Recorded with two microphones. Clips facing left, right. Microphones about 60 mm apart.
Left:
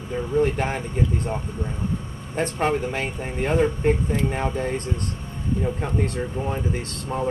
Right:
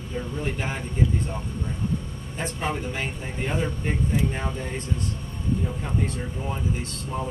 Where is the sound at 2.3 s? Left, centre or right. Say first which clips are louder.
Left 6 dB; left.